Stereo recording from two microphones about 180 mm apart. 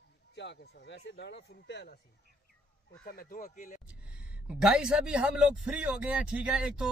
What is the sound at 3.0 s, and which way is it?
Speech, 55° left (ahead or behind).